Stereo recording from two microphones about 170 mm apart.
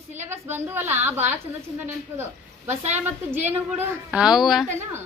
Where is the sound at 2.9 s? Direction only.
10° right (ahead or behind).